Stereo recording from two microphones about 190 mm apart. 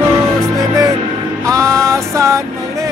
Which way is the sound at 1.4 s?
15° right (ahead or behind).